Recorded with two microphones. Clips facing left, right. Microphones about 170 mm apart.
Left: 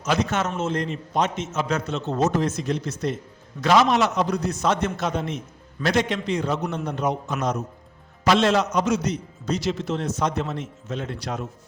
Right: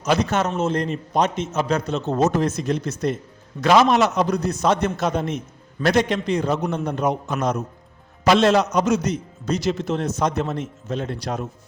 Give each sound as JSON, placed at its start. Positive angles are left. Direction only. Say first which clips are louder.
{"t": 0.0, "sound": "a man's voice", "louder": "right 3 dB", "side_deg": -35}